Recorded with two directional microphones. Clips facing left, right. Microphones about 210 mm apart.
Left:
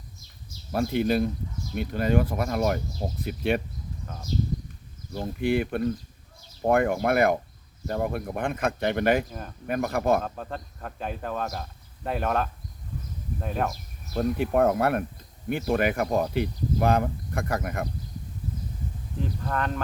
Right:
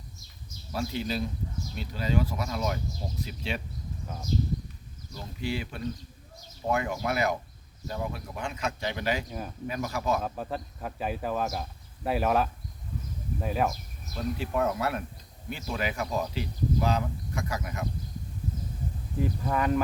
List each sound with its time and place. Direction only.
0.7 s speech: 55° left (ahead or behind)
5.1 s speech: 55° left (ahead or behind)
10.2 s speech: 5° right (ahead or behind)
14.1 s speech: 55° left (ahead or behind)
19.2 s speech: 10° right (ahead or behind)